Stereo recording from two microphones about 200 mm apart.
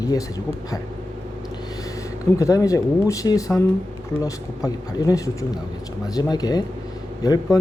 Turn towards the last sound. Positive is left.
turn(degrees=20)  # may be behind; listen again after turning